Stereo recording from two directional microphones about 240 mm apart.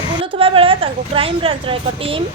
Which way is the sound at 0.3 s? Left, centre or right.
Right.